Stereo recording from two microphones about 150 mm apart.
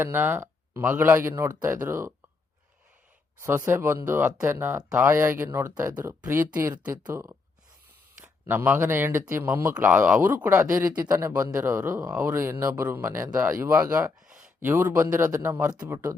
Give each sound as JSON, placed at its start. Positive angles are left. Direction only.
{"t": 0.0, "sound": "speech", "side_deg": -15}
{"t": 3.4, "sound": "speech", "side_deg": -15}
{"t": 14.2, "sound": "a sound", "side_deg": -5}
{"t": 14.6, "sound": "speech", "side_deg": -15}
{"t": 15.7, "sound": "speech", "side_deg": -25}